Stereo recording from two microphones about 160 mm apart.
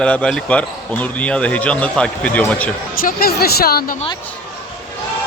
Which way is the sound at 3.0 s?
75° left (ahead or behind).